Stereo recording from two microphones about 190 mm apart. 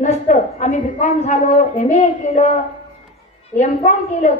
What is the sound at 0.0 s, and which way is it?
A woman's voice, 40° left (ahead or behind).